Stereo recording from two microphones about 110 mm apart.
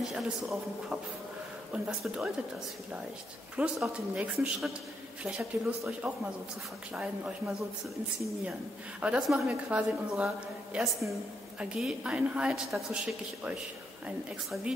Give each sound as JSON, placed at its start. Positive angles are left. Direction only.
{"t": 0.0, "sound": "a man's voice", "side_deg": -5}
{"t": 3.5, "sound": "speech", "side_deg": -10}
{"t": 9.0, "sound": "a man's voice", "side_deg": -5}
{"t": 9.7, "sound": "speech", "side_deg": -10}